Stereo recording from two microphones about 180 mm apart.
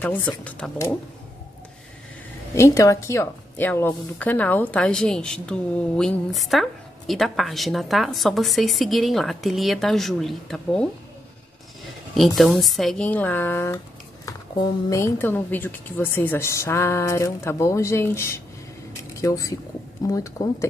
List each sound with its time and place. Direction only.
0.0 s speech: 10° left (ahead or behind)
2.5 s a woman's voice: 15° left (ahead or behind)
12.2 s a woman's voice: centre (ahead or behind)
14.9 s speech: 15° left (ahead or behind)